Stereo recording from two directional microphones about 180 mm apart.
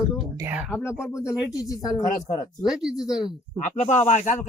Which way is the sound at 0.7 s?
15° left (ahead or behind).